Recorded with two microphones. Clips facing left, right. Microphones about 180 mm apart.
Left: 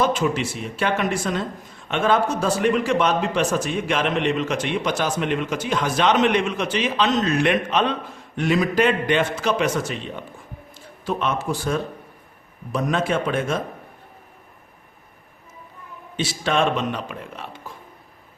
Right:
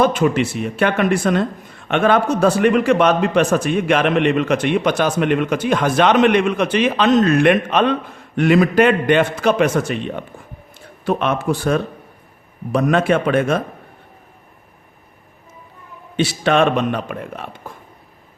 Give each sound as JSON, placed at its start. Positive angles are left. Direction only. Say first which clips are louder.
{"t": 0.0, "sound": "speech", "louder": "right 5 dB", "side_deg": -60}
{"t": 16.1, "sound": "speech", "louder": "right 6 dB", "side_deg": -65}